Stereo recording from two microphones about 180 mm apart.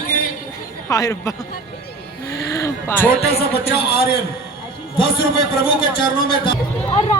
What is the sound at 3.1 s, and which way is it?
Speech, 60° left (ahead or behind).